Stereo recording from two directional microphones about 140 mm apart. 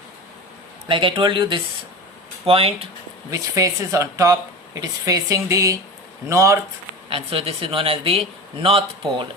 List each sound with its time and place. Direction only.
0.9 s a man's voice: 35° right (ahead or behind)
3.2 s speech: 25° right (ahead or behind)
7.1 s a man's voice: 40° right (ahead or behind)